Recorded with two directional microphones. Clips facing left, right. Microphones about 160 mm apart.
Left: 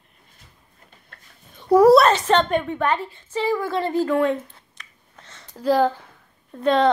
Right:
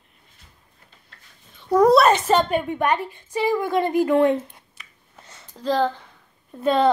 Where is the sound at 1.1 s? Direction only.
55° left (ahead or behind).